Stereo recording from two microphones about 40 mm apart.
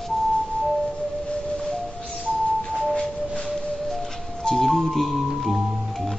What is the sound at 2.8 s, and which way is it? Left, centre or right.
Music, centre.